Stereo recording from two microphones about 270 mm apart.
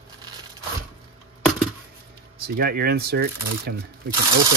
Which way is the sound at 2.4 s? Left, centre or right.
Right.